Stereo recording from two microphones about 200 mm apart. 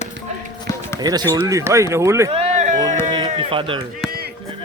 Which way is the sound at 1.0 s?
20° right (ahead or behind).